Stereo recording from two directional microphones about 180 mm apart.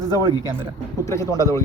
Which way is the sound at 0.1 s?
20° left (ahead or behind).